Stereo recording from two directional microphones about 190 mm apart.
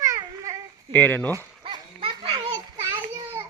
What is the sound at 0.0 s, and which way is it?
Babbling, 15° right (ahead or behind).